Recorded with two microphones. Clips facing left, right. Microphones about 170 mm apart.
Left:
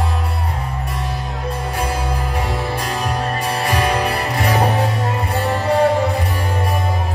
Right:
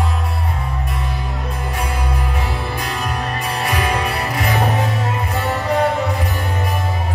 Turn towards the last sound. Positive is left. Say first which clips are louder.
# left 2 dB
turn(degrees=30)  # may be behind; listen again after turning